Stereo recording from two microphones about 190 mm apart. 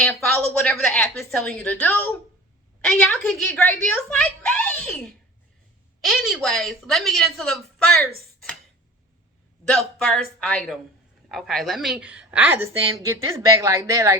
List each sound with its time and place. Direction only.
0.0 s a woman's voice: 5° left (ahead or behind)
9.6 s a woman's voice: 5° left (ahead or behind); by 14.2 s 15° right (ahead or behind)